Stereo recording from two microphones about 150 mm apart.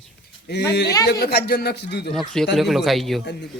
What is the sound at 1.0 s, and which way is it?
Speech, 90° left.